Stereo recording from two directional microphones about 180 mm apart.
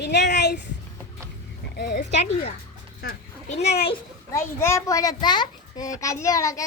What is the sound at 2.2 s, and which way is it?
A child's voice, 35° left (ahead or behind).